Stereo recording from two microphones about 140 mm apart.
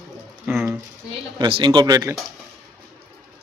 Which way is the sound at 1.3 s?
35° right (ahead or behind).